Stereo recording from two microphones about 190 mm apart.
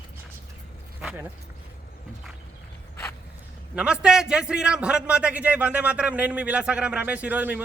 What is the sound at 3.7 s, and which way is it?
A man's voice, 5° right (ahead or behind).